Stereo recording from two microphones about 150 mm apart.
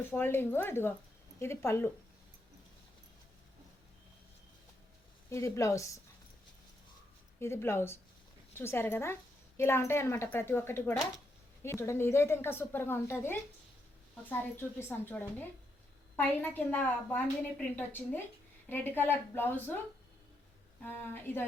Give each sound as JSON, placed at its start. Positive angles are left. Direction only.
{"t": 0.2, "sound": "a woman's voice", "side_deg": 15}
{"t": 5.3, "sound": "a woman's voice", "side_deg": 20}
{"t": 7.3, "sound": "a woman's voice", "side_deg": 15}
{"t": 20.8, "sound": "a woman's voice", "side_deg": 15}